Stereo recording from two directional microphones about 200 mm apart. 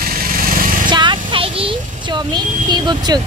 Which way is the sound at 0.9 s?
25° right (ahead or behind).